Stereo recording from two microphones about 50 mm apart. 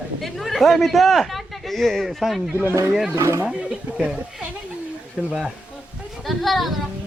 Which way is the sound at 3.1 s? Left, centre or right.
Right.